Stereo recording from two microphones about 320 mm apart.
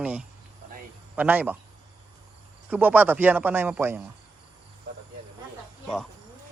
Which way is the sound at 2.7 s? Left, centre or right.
Centre.